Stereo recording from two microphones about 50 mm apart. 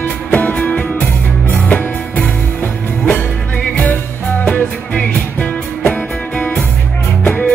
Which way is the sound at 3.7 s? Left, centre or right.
Left.